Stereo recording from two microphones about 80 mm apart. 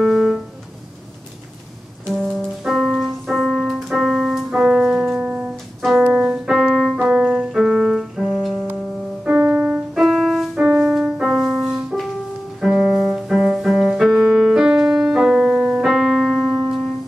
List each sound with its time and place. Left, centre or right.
0.0 s music: centre
2.6 s keyboard: centre
5.8 s music: centre
6.0 s piano: centre
9.2 s music: centre
9.9 s music: centre
10.7 s music: centre